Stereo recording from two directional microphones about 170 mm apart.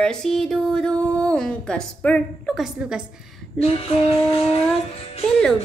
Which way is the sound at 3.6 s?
35° left (ahead or behind).